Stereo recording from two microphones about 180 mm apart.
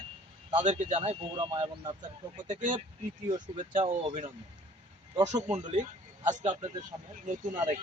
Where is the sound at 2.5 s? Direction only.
45° right (ahead or behind).